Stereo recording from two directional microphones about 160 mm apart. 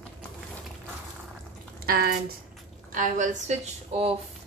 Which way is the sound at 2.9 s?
55° right (ahead or behind).